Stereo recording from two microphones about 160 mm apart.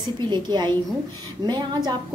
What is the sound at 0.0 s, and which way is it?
A woman's voice, 25° right (ahead or behind).